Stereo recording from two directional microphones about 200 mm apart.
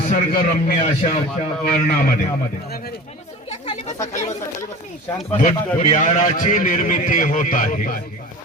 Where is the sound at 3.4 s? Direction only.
30° left (ahead or behind).